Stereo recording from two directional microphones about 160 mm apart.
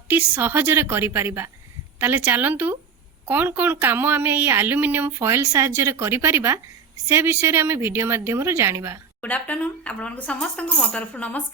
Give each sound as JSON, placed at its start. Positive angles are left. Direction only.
{"t": 0.1, "sound": "speech", "side_deg": -15}
{"t": 9.2, "sound": "speech", "side_deg": 10}